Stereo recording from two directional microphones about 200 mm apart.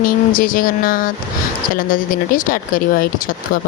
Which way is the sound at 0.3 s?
45° left (ahead or behind).